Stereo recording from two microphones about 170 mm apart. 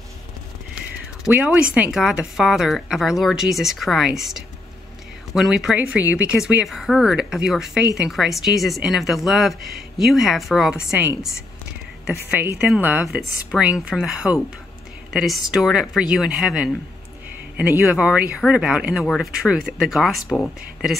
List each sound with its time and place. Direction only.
0.7 s speech: 5° right (ahead or behind)